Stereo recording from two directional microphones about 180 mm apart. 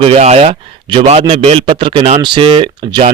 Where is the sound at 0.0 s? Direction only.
35° right (ahead or behind).